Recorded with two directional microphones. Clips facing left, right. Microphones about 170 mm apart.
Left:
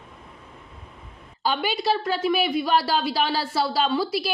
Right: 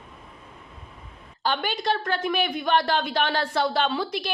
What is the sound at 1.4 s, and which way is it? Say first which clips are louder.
A woman's voice: left 2 dB; 5° left (ahead or behind).